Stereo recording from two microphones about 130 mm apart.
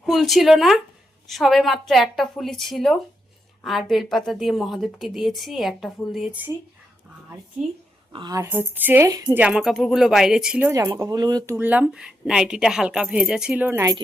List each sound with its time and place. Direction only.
0.0 s a woman's voice: centre (ahead or behind)
8.1 s a woman's voice: 35° right (ahead or behind)
8.4 s a woman's voice: 15° right (ahead or behind)
9.0 s speech: 30° right (ahead or behind)
9.3 s a woman's voice: 10° right (ahead or behind)
10.7 s speech: 25° right (ahead or behind)
11.5 s a woman's voice: 15° right (ahead or behind)